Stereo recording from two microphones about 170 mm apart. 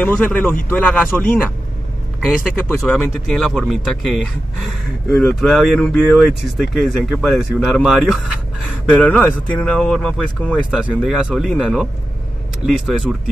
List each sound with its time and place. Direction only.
0.0 s speech: 10° left (ahead or behind)
2.5 s speech: 5° left (ahead or behind)
10.5 s speech: 5° right (ahead or behind)